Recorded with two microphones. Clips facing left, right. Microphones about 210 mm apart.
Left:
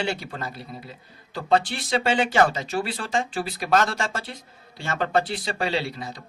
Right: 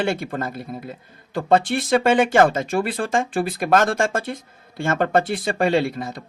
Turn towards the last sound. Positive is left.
turn(degrees=-55)  # may be behind; listen again after turning